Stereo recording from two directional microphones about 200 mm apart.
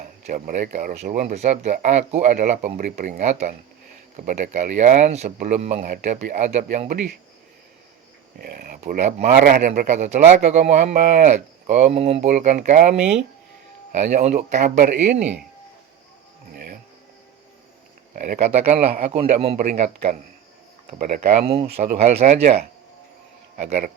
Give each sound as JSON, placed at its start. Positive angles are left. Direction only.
{"t": 0.0, "sound": "speech", "side_deg": -45}
{"t": 8.4, "sound": "speech", "side_deg": -45}
{"t": 16.5, "sound": "a sound", "side_deg": -45}
{"t": 18.1, "sound": "speech", "side_deg": -40}
{"t": 21.4, "sound": "speech", "side_deg": -30}
{"t": 23.6, "sound": "speech", "side_deg": -40}